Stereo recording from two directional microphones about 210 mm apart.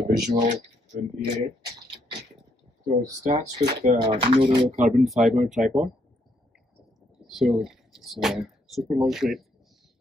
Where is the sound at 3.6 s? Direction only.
35° right (ahead or behind).